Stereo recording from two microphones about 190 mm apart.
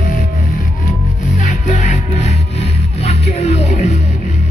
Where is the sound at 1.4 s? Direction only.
40° left (ahead or behind).